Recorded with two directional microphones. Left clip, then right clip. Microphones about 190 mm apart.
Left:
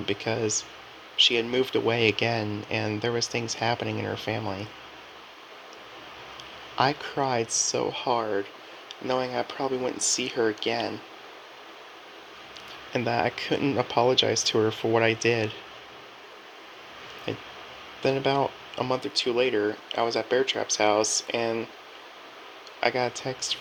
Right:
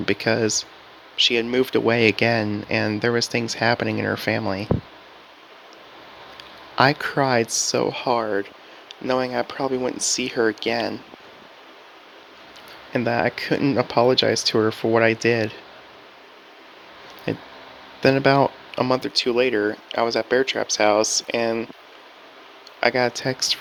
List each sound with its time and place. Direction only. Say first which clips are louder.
0.0 s speech: right 7 dB; 40° right (ahead or behind)
6.7 s speech: right 7 dB; 35° right (ahead or behind)
12.9 s speech: right 4 dB; 30° right (ahead or behind)
17.3 s speech: right 6 dB; 35° right (ahead or behind)
22.8 s speech: right 6 dB; 40° right (ahead or behind)